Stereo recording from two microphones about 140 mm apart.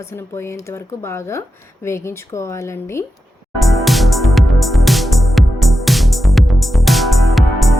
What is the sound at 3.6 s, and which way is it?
Music, centre (ahead or behind).